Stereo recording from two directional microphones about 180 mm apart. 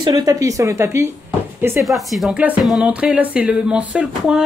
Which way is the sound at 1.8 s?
Centre (ahead or behind).